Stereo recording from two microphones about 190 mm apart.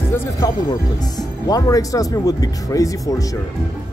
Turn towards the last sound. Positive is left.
turn(degrees=15)  # may be behind; listen again after turning